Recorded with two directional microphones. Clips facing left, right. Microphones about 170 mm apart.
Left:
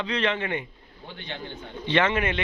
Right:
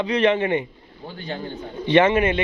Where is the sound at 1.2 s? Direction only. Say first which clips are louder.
Right 7 dB; 40° right (ahead or behind).